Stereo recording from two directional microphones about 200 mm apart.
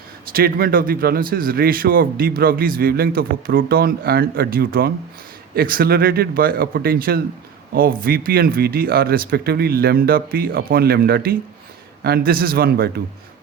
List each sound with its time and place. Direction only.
0.3 s speech: 50° right (ahead or behind)